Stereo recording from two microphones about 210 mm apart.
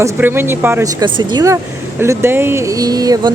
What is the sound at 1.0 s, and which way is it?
Speech, 20° right (ahead or behind).